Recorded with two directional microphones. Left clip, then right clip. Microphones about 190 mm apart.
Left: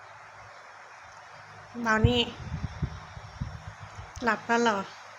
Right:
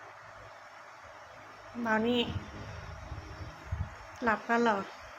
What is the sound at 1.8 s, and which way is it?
Speech, 25° left (ahead or behind).